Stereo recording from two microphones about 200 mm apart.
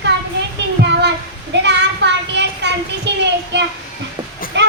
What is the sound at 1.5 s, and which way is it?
A child's voice, 60° right (ahead or behind).